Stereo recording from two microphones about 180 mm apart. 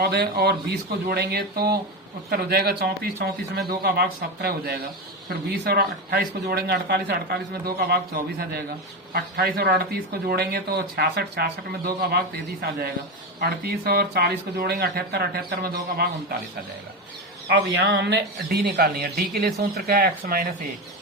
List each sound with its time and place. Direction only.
0.0 s speech: 60° right (ahead or behind)
17.5 s speech: 70° right (ahead or behind)